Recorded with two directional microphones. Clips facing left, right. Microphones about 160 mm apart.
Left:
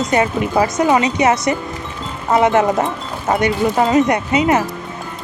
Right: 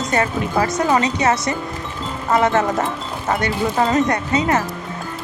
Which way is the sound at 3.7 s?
10° left (ahead or behind).